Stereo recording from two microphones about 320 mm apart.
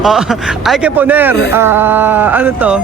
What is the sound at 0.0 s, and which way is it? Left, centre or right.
Speech, centre.